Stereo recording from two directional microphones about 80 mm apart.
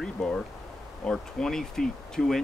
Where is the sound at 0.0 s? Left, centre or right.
Centre.